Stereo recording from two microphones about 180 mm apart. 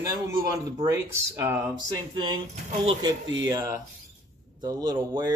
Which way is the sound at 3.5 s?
20° right (ahead or behind).